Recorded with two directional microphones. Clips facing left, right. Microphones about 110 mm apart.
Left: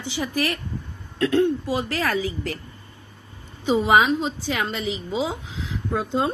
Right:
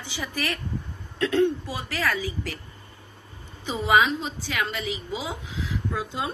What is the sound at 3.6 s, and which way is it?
Speech, 20° left (ahead or behind).